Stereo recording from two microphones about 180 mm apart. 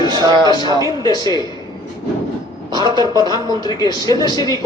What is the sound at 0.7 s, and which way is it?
Speech, 25° left (ahead or behind).